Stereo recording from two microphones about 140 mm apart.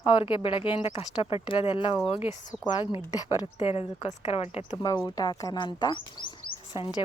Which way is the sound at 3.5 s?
45° left (ahead or behind).